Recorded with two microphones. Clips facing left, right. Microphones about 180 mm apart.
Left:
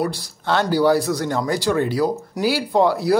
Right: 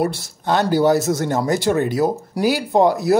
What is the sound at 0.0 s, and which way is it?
Speech, 25° right (ahead or behind).